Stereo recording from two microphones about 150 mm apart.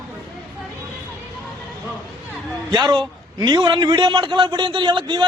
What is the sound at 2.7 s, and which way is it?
A man's voice, 30° right (ahead or behind).